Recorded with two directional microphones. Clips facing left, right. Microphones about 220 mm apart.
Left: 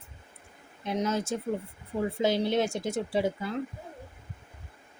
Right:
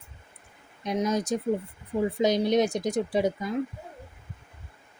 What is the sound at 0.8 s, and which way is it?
Speech, 15° right (ahead or behind).